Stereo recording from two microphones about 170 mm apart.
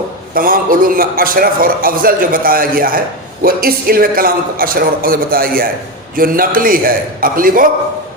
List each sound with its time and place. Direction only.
0.3 s a man's voice: 55° right (ahead or behind)